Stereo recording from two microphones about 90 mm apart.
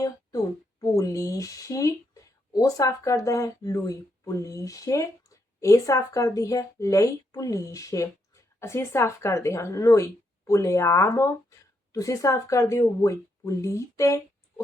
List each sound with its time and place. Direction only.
0.0 s speech: 40° left (ahead or behind)